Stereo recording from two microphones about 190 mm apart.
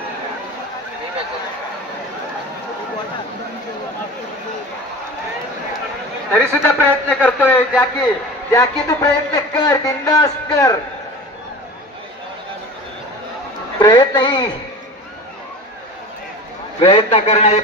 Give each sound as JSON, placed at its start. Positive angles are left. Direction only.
{"t": 6.3, "sound": "a man's voice", "side_deg": 5}
{"t": 13.7, "sound": "a woman's voice", "side_deg": 20}
{"t": 16.8, "sound": "a man's voice", "side_deg": 30}